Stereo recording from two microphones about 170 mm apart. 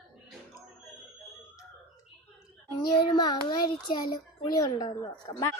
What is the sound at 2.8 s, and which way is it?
A child's voice, 25° left (ahead or behind).